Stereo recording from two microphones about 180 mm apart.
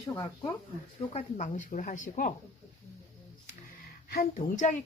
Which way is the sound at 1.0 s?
40° left (ahead or behind).